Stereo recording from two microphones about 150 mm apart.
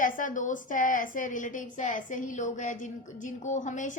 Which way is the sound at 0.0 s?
60° left (ahead or behind).